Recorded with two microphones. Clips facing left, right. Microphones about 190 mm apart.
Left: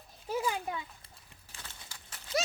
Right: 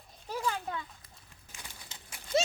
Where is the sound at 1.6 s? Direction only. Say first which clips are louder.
Right 1 dB; 20° right (ahead or behind).